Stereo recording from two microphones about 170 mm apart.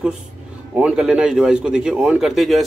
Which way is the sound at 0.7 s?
5° right (ahead or behind).